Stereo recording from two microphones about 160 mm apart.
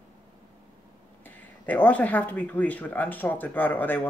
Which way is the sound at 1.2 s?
10° left (ahead or behind).